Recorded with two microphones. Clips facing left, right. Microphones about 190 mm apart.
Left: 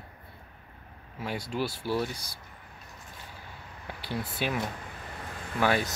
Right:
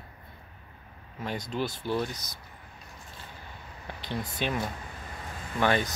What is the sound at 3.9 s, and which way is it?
Speech, 10° left (ahead or behind).